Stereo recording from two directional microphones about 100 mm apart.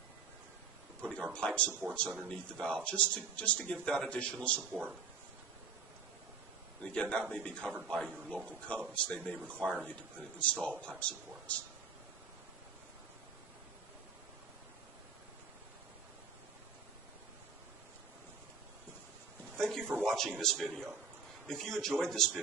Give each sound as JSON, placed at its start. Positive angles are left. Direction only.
{"t": 1.0, "sound": "speech", "side_deg": 10}
{"t": 1.7, "sound": "speech", "side_deg": -15}
{"t": 2.6, "sound": "speech", "side_deg": 10}
{"t": 4.6, "sound": "speech", "side_deg": -15}
{"t": 6.8, "sound": "speech", "side_deg": 10}
{"t": 9.8, "sound": "speech", "side_deg": 15}
{"t": 19.5, "sound": "a sound", "side_deg": 5}
{"t": 20.1, "sound": "a man's voice", "side_deg": 5}